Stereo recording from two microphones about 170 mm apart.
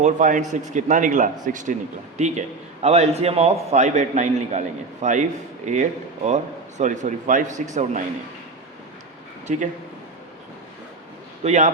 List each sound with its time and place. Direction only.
0.0 s a man's voice: 45° right (ahead or behind)
9.5 s a man's voice: 45° right (ahead or behind)
11.4 s a man's voice: 45° right (ahead or behind)